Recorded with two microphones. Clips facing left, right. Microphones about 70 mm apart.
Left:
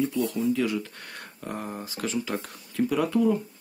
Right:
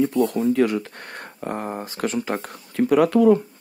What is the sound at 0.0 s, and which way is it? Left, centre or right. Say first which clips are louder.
Speech: right 6 dB; right.